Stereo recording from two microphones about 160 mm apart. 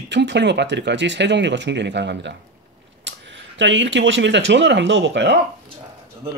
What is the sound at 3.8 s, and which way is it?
Speech, 90° right.